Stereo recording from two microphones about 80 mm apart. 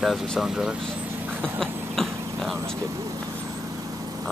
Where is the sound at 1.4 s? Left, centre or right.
Centre.